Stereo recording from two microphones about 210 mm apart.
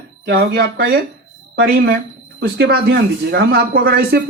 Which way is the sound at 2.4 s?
50° right (ahead or behind).